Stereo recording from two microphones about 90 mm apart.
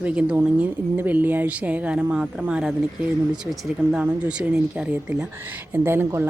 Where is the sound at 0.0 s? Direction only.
15° right (ahead or behind).